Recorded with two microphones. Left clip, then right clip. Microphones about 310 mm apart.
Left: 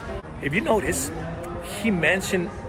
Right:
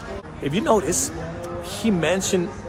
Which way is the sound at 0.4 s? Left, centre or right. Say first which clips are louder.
Right 2 dB; centre.